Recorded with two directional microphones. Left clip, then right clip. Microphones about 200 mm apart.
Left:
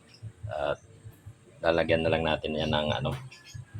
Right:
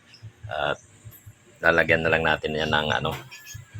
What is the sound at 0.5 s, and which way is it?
Speech, 5° right (ahead or behind).